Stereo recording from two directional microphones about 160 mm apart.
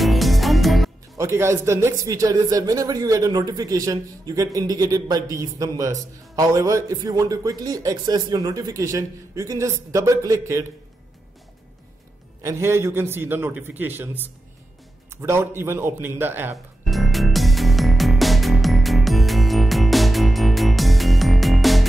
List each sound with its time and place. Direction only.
0.0 s music: centre (ahead or behind)
1.1 s a man's voice: 15° right (ahead or behind)
12.4 s a man's voice: 15° right (ahead or behind)
16.8 s music: centre (ahead or behind)